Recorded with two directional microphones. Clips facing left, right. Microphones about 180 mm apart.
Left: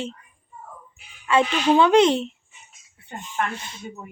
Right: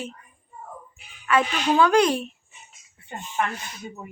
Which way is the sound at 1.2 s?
25° left (ahead or behind).